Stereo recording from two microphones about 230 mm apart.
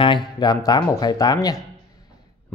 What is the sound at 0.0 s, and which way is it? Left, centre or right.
A man's voice, centre.